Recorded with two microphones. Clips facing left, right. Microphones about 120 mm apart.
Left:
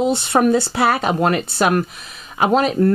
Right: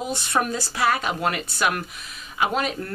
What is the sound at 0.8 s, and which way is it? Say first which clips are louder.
Speech: left 3 dB; 30° left (ahead or behind).